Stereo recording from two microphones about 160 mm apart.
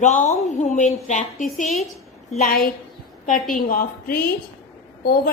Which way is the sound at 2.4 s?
65° left (ahead or behind).